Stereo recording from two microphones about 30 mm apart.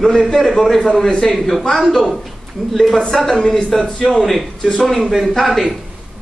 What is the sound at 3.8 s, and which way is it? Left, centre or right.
Speech, left.